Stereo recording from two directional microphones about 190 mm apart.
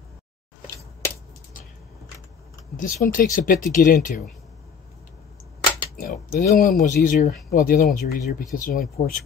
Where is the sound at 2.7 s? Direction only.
45° left (ahead or behind).